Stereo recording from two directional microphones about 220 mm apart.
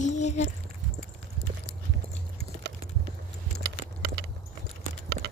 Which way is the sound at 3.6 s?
50° right (ahead or behind).